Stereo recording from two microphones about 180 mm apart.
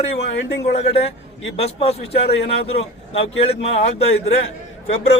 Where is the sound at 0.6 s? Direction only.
35° left (ahead or behind).